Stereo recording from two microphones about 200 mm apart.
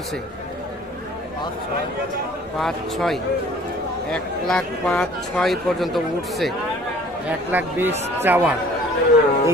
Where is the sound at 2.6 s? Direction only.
Centre (ahead or behind).